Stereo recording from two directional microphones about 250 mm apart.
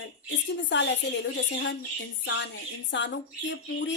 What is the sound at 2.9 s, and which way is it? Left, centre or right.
Speech, left.